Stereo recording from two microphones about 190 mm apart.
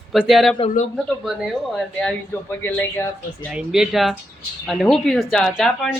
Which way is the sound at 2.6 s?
10° left (ahead or behind).